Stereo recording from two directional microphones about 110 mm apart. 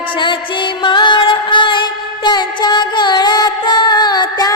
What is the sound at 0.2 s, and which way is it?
Music, 45° left (ahead or behind).